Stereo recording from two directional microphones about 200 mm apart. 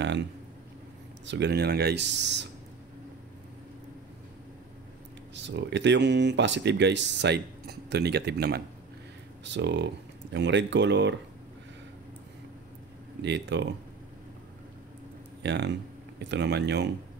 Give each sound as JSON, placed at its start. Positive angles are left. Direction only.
{"t": 0.0, "sound": "a sound", "side_deg": -60}
{"t": 1.2, "sound": "speech", "side_deg": -60}
{"t": 5.3, "sound": "speech", "side_deg": -60}
{"t": 13.2, "sound": "speech", "side_deg": -60}
{"t": 15.4, "sound": "speech", "side_deg": -60}